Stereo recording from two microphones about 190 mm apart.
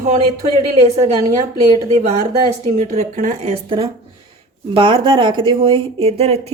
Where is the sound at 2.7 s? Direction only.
35° right (ahead or behind).